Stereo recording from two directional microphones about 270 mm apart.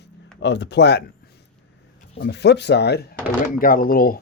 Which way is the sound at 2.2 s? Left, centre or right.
Left.